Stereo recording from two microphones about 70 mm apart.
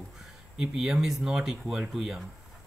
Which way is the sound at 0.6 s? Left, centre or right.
Centre.